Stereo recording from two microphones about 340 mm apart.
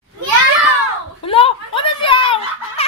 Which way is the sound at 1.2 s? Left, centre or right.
Centre.